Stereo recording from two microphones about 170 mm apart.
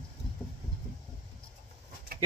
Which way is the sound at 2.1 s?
65° right (ahead or behind).